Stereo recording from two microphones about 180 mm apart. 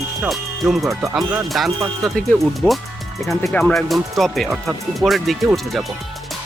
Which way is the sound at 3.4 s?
5° left (ahead or behind).